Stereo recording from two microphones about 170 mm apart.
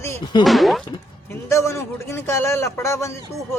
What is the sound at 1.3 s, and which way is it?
A man's voice, 15° left (ahead or behind).